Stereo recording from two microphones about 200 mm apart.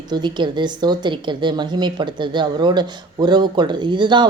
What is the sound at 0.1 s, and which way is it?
Speech, 20° right (ahead or behind).